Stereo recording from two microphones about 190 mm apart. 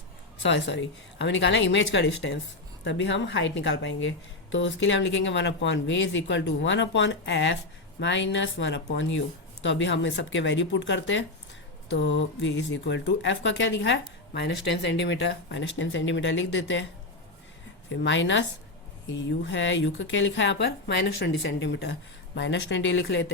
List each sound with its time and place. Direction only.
0.4 s speech: 70° left (ahead or behind)
17.8 s speech: 75° left (ahead or behind)